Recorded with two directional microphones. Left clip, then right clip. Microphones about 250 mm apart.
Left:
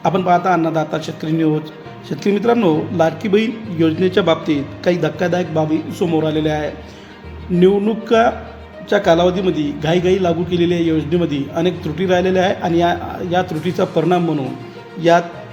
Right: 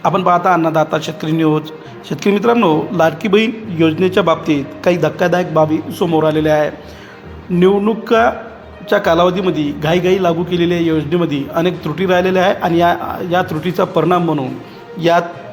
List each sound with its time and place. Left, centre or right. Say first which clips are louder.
0.0 s a man's voice: right 2 dB; centre